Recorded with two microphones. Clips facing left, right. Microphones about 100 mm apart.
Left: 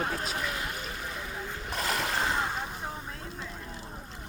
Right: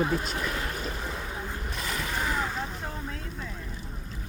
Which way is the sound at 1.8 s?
65° left (ahead or behind).